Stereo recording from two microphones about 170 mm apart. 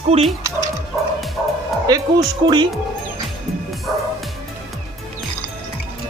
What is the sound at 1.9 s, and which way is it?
Speech, 20° right (ahead or behind).